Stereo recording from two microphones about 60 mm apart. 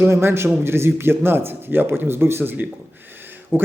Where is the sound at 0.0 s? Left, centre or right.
Right.